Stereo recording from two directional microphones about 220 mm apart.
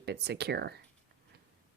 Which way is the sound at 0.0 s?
50° right (ahead or behind).